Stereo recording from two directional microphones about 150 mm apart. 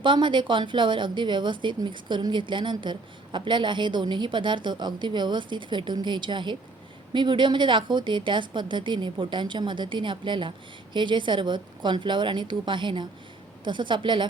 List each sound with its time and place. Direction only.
0.0 s a woman's voice: 30° right (ahead or behind)